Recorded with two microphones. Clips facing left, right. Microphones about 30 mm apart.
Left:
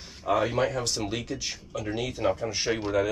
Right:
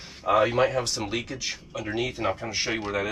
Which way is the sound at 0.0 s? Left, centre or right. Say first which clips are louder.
Right 4 dB; centre.